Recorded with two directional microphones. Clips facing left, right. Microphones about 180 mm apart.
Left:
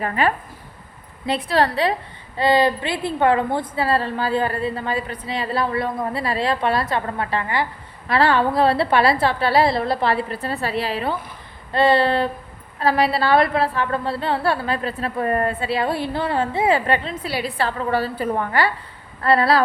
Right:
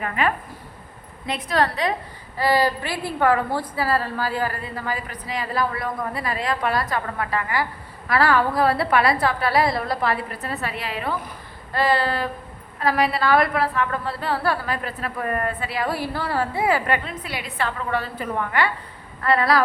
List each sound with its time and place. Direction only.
0.0 s a woman's voice: 35° left (ahead or behind)